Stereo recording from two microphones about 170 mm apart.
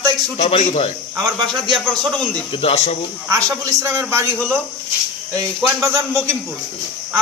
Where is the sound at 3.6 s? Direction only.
15° right (ahead or behind).